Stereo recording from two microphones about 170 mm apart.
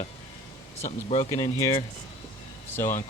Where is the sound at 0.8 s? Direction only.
40° left (ahead or behind).